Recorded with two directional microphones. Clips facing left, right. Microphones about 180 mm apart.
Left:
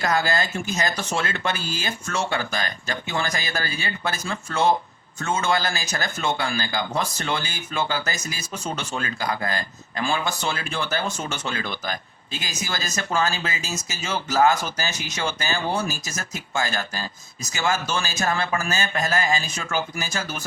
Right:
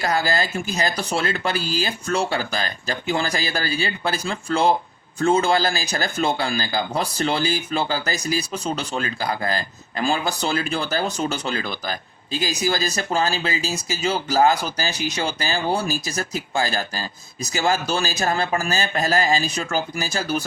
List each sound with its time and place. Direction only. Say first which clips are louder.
0.0 s speech: right 1 dB; 35° right (ahead or behind)